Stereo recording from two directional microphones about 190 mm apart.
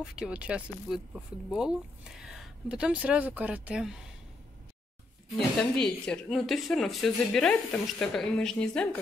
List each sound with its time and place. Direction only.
0.0 s speech: 5° right (ahead or behind)
5.6 s speech: 5° left (ahead or behind)